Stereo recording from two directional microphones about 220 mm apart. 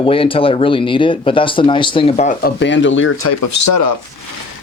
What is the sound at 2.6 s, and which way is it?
Speech, 55° left (ahead or behind).